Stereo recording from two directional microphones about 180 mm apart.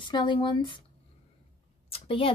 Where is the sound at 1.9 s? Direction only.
30° left (ahead or behind).